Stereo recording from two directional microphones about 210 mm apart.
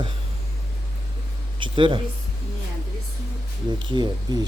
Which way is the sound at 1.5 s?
25° right (ahead or behind).